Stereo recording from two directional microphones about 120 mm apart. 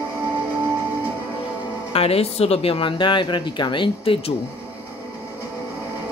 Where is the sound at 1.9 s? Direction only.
55° left (ahead or behind).